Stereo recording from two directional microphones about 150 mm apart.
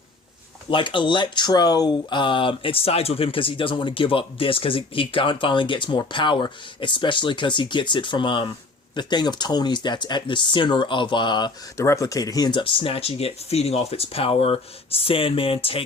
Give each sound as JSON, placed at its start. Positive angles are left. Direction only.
{"t": 0.7, "sound": "speech", "side_deg": 35}
{"t": 11.8, "sound": "speech", "side_deg": 20}